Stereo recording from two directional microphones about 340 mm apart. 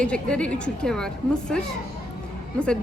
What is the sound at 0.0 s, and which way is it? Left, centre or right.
A woman's voice, centre.